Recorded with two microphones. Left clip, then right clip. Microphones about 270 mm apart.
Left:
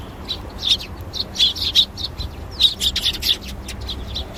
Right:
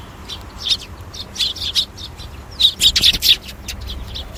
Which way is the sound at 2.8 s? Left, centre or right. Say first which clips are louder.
Right 7 dB; right.